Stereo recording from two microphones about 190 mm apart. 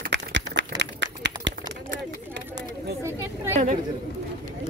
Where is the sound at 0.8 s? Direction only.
70° right (ahead or behind).